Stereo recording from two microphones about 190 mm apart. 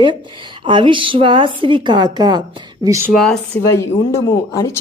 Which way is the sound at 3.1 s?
Centre (ahead or behind).